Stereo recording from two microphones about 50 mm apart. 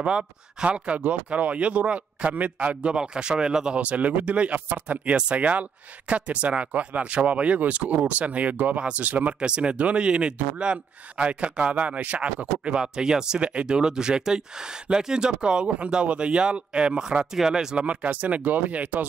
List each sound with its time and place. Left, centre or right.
0.0 s speech: centre
0.7 s speech: right
17.4 s speech: centre
17.7 s speech: right